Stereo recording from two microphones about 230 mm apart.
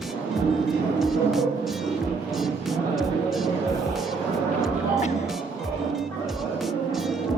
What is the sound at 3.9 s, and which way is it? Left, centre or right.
Speech, centre.